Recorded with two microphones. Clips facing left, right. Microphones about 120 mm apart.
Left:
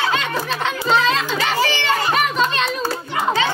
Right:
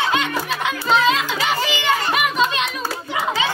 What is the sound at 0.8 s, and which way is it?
Children playing, 5° right (ahead or behind).